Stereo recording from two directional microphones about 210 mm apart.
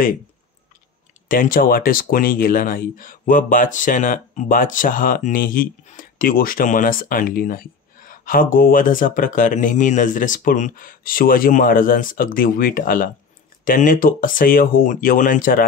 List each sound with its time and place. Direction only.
1.3 s speech: 40° left (ahead or behind)